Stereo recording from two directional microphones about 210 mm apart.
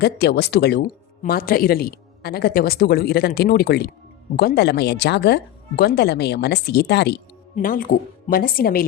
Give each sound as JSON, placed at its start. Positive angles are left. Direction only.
{"t": 0.0, "sound": "speech", "side_deg": 50}
{"t": 7.5, "sound": "speech", "side_deg": 40}